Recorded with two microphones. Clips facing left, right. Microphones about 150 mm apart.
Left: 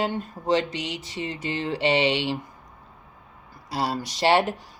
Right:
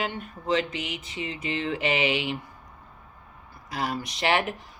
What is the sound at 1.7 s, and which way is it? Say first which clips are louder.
Speech: left 5 dB; 30° left (ahead or behind).